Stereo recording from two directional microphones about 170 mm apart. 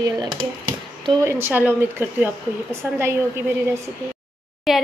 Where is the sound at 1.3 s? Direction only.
15° right (ahead or behind).